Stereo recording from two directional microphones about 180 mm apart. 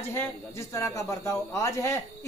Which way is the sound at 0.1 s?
15° left (ahead or behind).